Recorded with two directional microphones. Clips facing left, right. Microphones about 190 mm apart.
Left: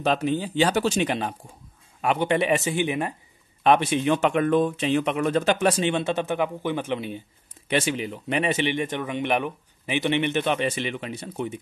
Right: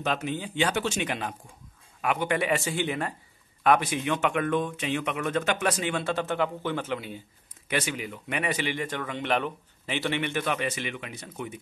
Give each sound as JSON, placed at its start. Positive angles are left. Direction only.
{"t": 0.0, "sound": "speech", "side_deg": 35}